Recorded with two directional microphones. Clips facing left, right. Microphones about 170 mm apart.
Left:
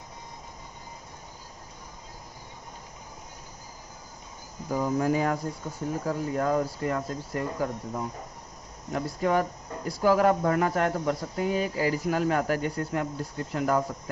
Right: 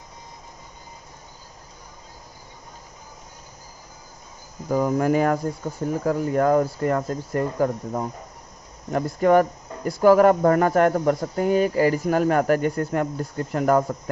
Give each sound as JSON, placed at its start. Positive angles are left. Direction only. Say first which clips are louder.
{"t": 4.7, "sound": "speech", "louder": "right 5 dB", "side_deg": -65}